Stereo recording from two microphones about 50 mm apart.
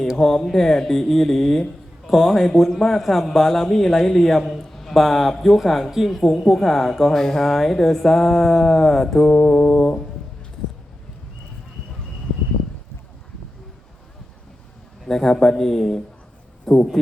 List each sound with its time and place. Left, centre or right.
0.2 s a man's voice: centre
15.0 s speech: centre